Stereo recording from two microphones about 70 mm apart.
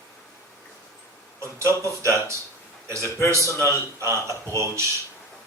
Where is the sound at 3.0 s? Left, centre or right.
Left.